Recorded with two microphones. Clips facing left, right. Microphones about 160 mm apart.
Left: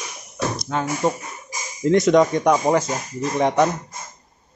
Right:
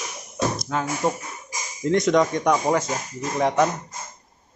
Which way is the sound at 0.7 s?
5° right (ahead or behind).